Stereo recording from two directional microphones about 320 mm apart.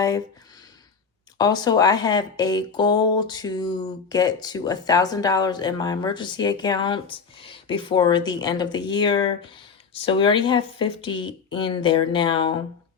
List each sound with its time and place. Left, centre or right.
1.4 s speech: centre